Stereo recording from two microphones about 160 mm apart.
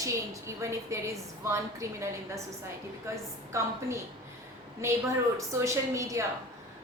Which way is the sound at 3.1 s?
20° right (ahead or behind).